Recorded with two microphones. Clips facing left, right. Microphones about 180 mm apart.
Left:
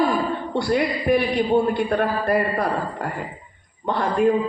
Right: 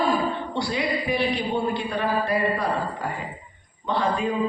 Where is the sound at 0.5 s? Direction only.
50° left (ahead or behind).